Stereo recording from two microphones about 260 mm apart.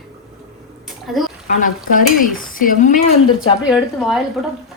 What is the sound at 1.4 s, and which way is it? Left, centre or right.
Stir, left.